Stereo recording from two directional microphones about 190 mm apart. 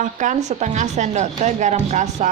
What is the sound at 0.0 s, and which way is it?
Speech, 40° right (ahead or behind).